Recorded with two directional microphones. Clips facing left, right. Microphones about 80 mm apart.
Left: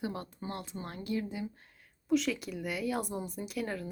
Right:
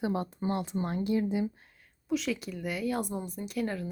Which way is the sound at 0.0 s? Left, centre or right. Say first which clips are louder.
Right 7 dB; right.